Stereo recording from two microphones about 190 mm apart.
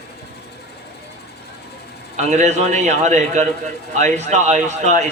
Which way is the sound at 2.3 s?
40° right (ahead or behind).